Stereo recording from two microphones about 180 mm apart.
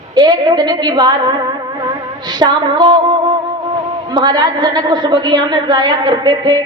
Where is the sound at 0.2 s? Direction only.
25° right (ahead or behind).